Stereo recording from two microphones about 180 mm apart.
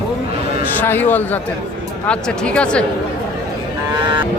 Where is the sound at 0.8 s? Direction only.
10° left (ahead or behind).